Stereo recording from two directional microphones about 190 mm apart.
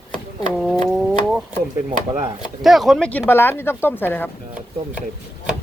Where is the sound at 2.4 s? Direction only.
Centre (ahead or behind).